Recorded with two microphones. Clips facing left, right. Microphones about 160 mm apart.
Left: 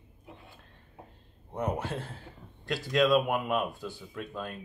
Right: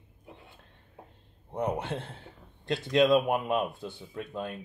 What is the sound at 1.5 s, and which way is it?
A man's voice, 25° right (ahead or behind).